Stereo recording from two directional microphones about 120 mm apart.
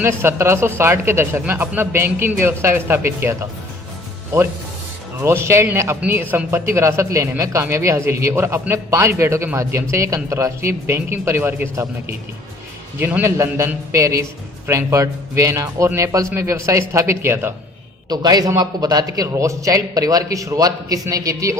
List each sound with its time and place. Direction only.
0.0 s a man's voice: 20° right (ahead or behind)
5.2 s a man's voice: 25° right (ahead or behind)
18.1 s a man's voice: 35° right (ahead or behind)